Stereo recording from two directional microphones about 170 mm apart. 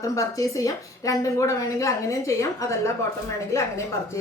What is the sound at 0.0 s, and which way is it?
A woman's voice, 20° left (ahead or behind).